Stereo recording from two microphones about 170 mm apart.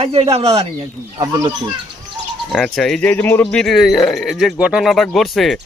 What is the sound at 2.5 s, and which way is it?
Speech, 5° left (ahead or behind).